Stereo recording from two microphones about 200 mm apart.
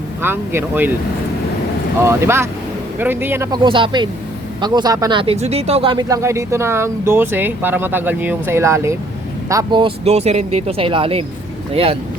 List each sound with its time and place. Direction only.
0.2 s speech: 10° right (ahead or behind)
2.0 s speech: 15° right (ahead or behind); by 11.9 s 30° right (ahead or behind)